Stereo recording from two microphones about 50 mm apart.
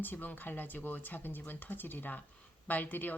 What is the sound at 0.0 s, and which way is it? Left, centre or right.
Speech, left.